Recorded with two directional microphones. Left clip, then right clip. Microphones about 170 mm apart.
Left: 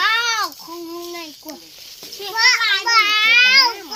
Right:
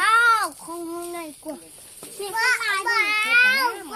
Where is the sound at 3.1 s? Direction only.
70° right (ahead or behind).